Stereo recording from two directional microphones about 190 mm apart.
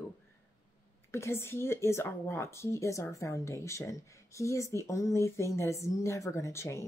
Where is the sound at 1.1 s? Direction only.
15° left (ahead or behind).